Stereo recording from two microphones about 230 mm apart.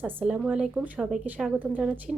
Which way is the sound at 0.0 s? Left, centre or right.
Centre.